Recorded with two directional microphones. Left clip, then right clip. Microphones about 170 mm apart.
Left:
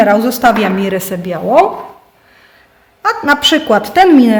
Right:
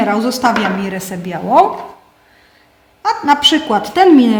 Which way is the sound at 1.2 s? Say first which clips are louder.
Even; 35° left (ahead or behind).